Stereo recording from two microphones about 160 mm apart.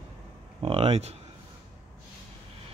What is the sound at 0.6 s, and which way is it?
Speech, 35° right (ahead or behind).